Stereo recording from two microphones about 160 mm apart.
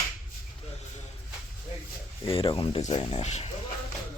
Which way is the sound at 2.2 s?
35° left (ahead or behind).